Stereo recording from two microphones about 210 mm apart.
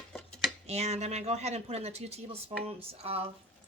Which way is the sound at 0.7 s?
30° right (ahead or behind).